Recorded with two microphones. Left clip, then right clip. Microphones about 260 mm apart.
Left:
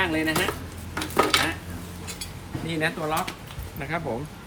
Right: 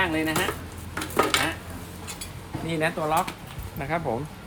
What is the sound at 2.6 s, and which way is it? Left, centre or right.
Speech, right.